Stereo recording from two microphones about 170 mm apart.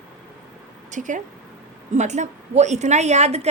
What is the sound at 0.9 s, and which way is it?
A woman's voice, 45° right (ahead or behind).